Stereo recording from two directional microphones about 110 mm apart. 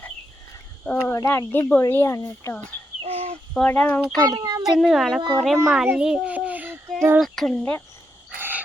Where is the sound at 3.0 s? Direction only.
65° right (ahead or behind).